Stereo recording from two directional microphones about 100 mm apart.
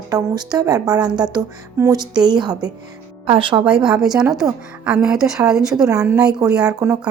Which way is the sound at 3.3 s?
60° right (ahead or behind).